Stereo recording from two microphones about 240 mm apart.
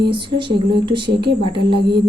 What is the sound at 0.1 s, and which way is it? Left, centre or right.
Speech, right.